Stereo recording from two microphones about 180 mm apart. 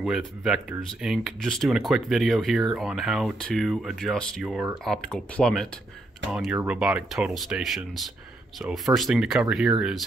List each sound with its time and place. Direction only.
0.0 s speech: centre (ahead or behind)